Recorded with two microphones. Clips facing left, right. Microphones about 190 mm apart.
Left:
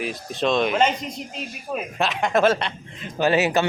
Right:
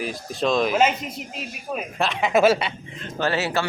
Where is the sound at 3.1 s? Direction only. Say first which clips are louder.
Left 4 dB; 15° left (ahead or behind).